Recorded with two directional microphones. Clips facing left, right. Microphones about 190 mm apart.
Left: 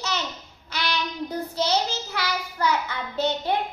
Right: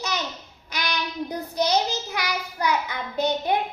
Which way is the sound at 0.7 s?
15° right (ahead or behind).